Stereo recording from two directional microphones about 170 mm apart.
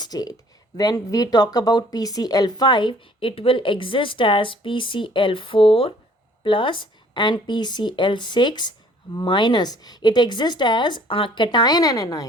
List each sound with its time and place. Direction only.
0.0 s speech: 25° left (ahead or behind)